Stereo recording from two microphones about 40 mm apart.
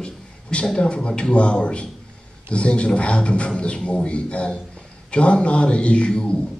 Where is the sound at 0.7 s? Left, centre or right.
Left.